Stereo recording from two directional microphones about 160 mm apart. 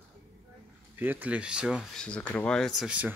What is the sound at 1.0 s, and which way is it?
Speech, 10° right (ahead or behind).